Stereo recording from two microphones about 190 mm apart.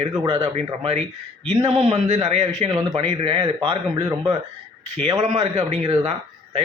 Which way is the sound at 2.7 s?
20° right (ahead or behind).